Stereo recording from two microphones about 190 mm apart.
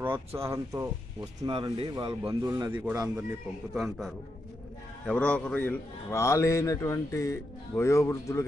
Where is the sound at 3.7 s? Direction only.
Centre (ahead or behind).